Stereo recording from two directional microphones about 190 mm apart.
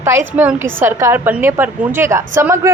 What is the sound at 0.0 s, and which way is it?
A woman's voice, 10° right (ahead or behind).